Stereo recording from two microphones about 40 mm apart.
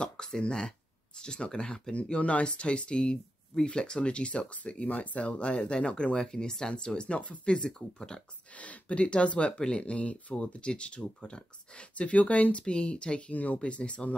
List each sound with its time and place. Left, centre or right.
0.0 s speech: centre
2.0 s speech: left
6.1 s speech: centre
8.5 s speech: left
12.6 s speech: left
13.3 s speech: left
13.6 s speech: left